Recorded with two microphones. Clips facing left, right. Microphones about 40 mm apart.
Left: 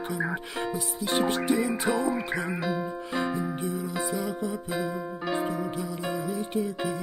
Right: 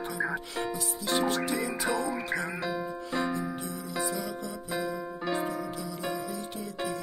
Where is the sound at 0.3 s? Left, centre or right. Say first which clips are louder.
Left 2 dB; centre.